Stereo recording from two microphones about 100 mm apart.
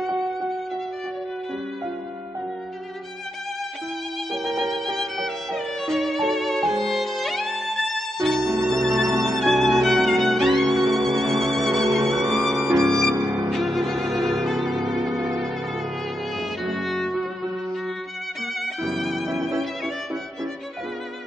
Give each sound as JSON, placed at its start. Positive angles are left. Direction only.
{"t": 0.2, "sound": "music", "side_deg": 0}
{"t": 4.3, "sound": "violin", "side_deg": 0}
{"t": 8.5, "sound": "music", "side_deg": -30}
{"t": 9.4, "sound": "music", "side_deg": 0}
{"t": 11.8, "sound": "music", "side_deg": -30}
{"t": 12.1, "sound": "music", "side_deg": 0}
{"t": 13.2, "sound": "music", "side_deg": -20}
{"t": 13.5, "sound": "music", "side_deg": 0}
{"t": 16.6, "sound": "music", "side_deg": 0}
{"t": 18.8, "sound": "music", "side_deg": 0}